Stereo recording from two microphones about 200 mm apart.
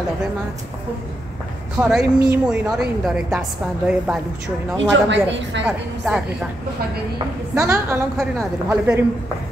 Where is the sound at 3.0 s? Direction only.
5° right (ahead or behind).